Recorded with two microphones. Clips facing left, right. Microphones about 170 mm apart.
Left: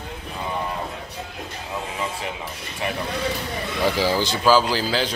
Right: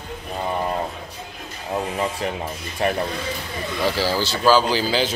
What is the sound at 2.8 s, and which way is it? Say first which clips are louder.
Speech: right 6 dB; 45° right (ahead or behind).